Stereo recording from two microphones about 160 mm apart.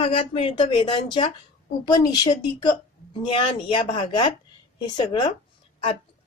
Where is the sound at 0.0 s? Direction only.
35° left (ahead or behind).